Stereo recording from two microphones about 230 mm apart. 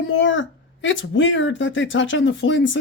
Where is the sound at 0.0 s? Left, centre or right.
Left.